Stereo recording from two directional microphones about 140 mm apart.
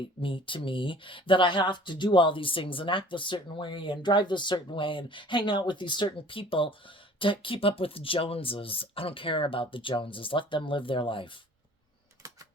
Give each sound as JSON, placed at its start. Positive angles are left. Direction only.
{"t": 0.2, "sound": "speech", "side_deg": 40}